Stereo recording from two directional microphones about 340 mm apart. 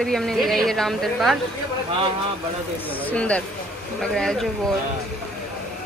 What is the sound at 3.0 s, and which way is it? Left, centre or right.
Speech, centre.